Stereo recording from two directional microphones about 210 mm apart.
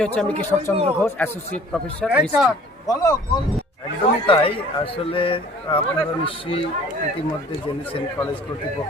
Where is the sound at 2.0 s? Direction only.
5° right (ahead or behind).